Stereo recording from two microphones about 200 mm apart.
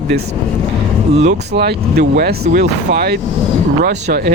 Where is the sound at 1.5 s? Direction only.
55° right (ahead or behind).